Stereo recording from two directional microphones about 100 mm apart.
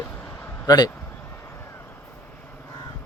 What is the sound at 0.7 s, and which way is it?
Speech, 40° left (ahead or behind).